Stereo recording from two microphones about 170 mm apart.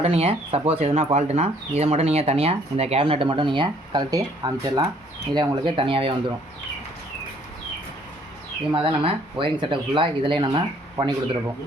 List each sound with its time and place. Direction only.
0.0 s speech: 35° right (ahead or behind)
8.7 s speech: 30° right (ahead or behind)